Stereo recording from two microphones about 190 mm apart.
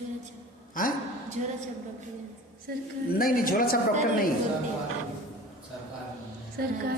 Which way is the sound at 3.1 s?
50° left (ahead or behind).